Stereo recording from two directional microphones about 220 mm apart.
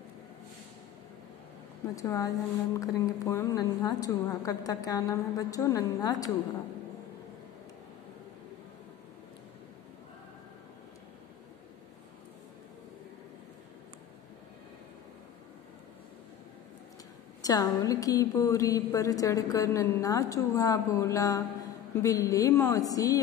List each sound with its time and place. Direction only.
2.0 s a woman's voice: 15° left (ahead or behind)
17.4 s a woman's voice: 15° left (ahead or behind)